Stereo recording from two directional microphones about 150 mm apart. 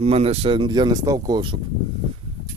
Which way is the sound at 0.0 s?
45° right (ahead or behind).